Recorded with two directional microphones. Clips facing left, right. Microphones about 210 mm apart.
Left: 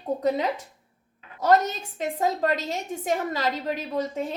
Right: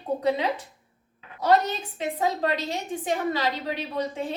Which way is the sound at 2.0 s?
45° left (ahead or behind).